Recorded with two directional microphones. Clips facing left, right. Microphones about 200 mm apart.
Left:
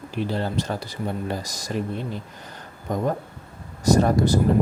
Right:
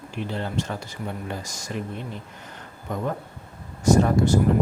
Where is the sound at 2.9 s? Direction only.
35° left (ahead or behind).